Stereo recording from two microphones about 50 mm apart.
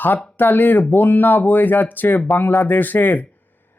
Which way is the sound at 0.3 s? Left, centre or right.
Left.